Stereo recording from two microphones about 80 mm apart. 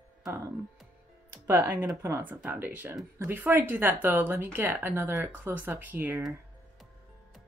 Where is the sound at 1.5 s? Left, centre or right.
Right.